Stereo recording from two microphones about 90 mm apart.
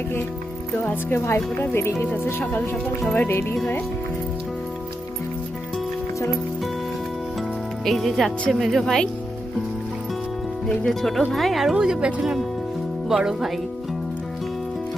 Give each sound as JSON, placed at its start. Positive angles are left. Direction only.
{"t": 1.2, "sound": "speech", "side_deg": 30}
{"t": 7.9, "sound": "speech", "side_deg": 0}
{"t": 10.7, "sound": "speech", "side_deg": 5}